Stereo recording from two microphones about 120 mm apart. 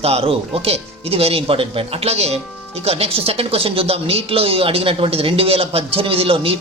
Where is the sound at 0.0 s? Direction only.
55° right (ahead or behind).